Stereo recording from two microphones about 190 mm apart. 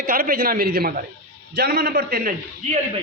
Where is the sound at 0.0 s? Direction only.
50° right (ahead or behind).